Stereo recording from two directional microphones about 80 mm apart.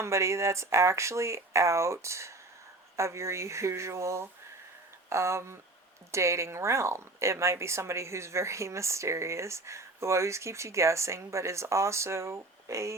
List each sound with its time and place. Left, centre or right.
0.0 s speech: right